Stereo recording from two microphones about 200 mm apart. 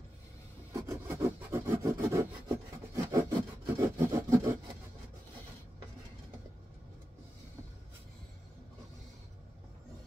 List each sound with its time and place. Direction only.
0.7 s rub: 15° right (ahead or behind)